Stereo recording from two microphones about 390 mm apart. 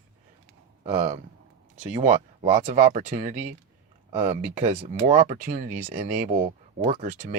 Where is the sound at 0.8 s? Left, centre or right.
Centre.